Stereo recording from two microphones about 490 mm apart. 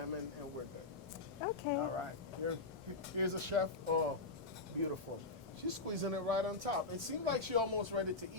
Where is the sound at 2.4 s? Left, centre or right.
Right.